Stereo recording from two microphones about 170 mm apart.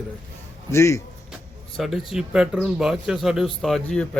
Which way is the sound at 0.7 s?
15° left (ahead or behind).